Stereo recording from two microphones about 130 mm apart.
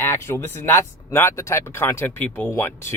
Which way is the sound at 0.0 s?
20° left (ahead or behind).